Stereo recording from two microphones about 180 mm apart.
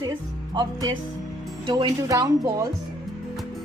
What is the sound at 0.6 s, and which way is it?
Speech, 25° right (ahead or behind).